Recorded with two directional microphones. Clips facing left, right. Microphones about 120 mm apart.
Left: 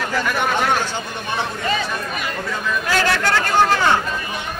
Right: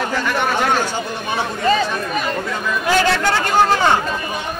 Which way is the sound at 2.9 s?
15° right (ahead or behind).